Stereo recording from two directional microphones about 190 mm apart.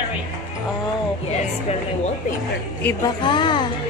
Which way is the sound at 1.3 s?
35° left (ahead or behind).